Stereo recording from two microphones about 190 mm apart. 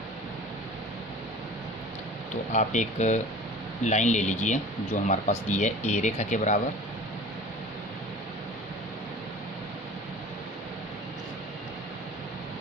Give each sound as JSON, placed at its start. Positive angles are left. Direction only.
{"t": 2.5, "sound": "speech", "side_deg": 40}